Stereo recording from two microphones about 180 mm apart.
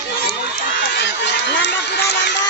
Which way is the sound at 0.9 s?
75° left (ahead or behind).